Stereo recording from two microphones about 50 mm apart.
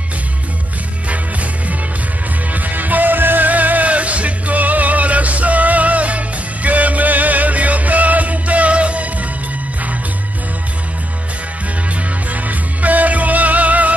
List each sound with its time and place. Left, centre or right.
2.5 s music: right
12.3 s music: right